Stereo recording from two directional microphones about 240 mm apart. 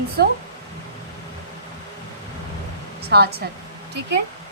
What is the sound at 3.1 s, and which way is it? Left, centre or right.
Speech, right.